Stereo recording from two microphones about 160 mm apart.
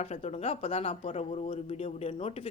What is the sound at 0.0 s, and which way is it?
Speech, 45° left (ahead or behind).